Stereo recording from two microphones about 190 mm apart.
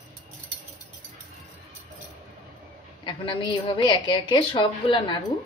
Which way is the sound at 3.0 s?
25° left (ahead or behind).